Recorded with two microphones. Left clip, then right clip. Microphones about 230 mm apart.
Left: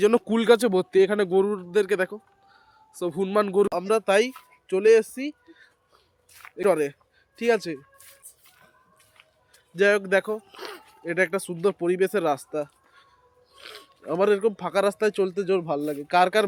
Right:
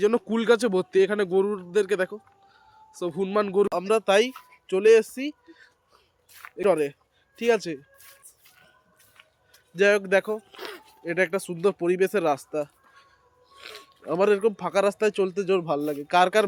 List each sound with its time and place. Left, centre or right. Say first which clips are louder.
0.0 s speech: left 2 dB; left
3.7 s speech: even; centre
7.3 s a sound: even; centre
9.7 s speech: even; centre